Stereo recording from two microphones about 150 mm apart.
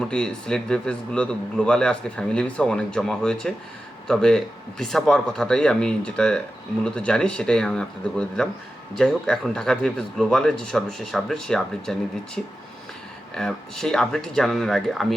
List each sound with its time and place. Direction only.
0.0 s speech: 5° left (ahead or behind)